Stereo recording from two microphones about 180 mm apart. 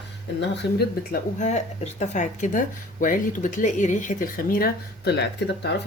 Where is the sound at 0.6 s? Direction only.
70° left (ahead or behind).